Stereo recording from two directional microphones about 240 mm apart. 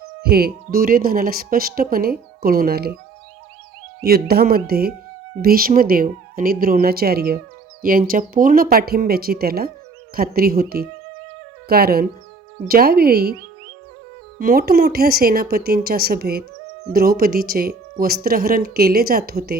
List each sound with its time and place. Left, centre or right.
0.2 s speech: right
4.0 s speech: right
14.3 s speech: right